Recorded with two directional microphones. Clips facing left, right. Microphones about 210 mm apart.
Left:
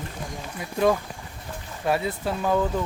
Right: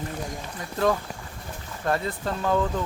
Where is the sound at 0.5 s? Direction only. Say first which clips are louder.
Left 2 dB; 10° left (ahead or behind).